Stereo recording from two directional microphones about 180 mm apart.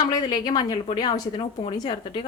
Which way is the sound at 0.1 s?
20° left (ahead or behind).